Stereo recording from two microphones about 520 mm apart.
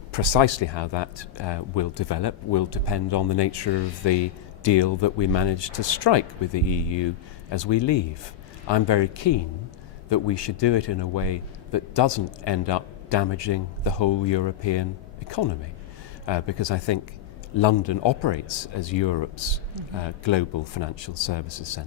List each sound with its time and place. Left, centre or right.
0.1 s speech: left
16.2 s speech: left